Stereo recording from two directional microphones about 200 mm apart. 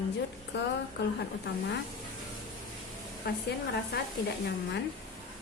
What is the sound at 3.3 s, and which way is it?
Speech, 50° left (ahead or behind).